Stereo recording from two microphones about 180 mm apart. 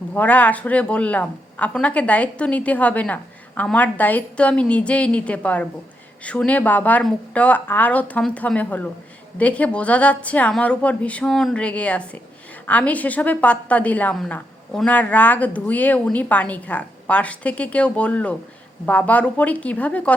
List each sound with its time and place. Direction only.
0.1 s a woman's voice: 10° left (ahead or behind)